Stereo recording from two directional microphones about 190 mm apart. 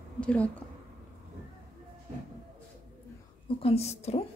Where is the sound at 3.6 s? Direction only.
35° left (ahead or behind).